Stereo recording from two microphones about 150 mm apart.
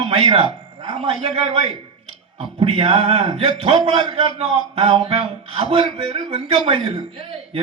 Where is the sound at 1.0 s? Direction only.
45° right (ahead or behind).